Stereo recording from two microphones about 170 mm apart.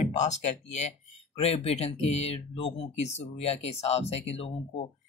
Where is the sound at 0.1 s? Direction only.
45° left (ahead or behind).